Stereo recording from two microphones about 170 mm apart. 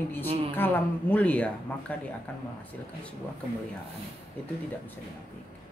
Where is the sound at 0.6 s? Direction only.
10° left (ahead or behind).